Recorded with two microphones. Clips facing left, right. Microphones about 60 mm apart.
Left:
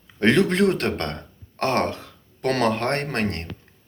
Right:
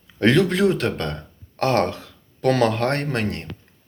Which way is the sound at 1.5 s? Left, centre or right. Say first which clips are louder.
Right 2 dB; left.